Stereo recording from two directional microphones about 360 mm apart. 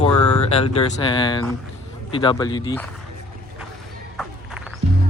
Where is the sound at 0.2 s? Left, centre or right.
Left.